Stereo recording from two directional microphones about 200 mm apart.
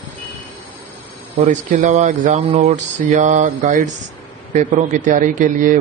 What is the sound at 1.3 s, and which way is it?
A man's voice, 35° right (ahead or behind).